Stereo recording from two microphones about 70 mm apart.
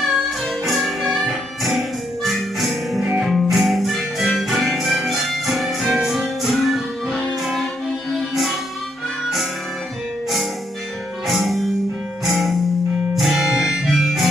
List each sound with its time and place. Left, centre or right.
0.7 s music: centre
11.2 s music: centre
13.1 s harmonica: centre